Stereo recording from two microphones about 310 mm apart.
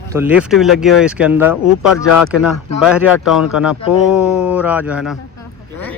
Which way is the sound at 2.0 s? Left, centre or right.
Left.